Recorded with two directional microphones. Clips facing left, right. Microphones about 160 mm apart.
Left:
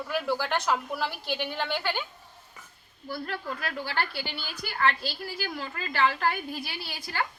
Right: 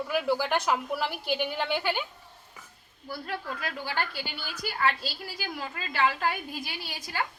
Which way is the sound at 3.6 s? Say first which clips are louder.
Left 2 dB; 15° right (ahead or behind).